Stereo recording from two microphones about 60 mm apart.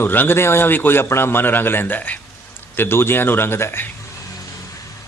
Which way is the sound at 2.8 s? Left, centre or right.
Left.